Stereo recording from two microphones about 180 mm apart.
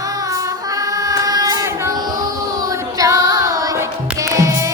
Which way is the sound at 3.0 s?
20° right (ahead or behind).